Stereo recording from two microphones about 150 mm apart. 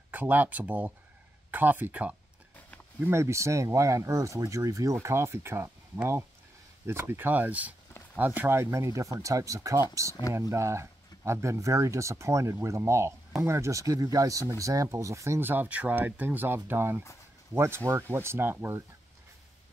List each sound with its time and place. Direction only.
0.1 s speech: 10° right (ahead or behind)